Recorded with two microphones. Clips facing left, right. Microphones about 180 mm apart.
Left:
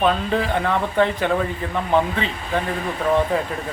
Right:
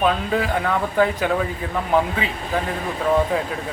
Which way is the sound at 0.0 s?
5° right (ahead or behind).